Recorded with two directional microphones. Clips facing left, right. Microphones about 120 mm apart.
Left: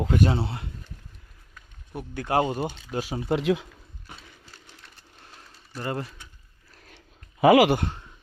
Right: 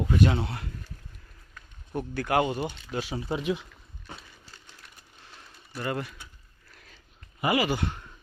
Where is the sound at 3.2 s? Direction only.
90° left.